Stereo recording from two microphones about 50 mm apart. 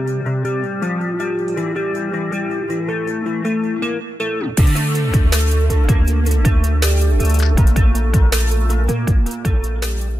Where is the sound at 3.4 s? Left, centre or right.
Left.